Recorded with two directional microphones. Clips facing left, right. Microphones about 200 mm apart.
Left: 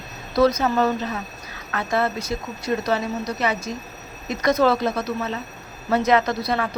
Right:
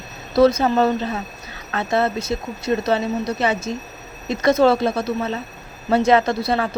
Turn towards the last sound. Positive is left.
turn(degrees=-30)  # may be behind; listen again after turning